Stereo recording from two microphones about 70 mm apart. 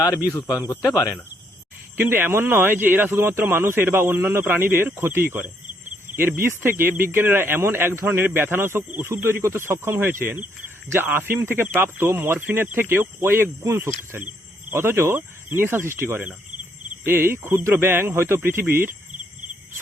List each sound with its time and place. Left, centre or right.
2.0 s speech: right